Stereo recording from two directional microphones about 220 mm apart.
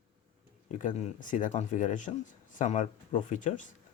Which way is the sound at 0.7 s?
35° left (ahead or behind).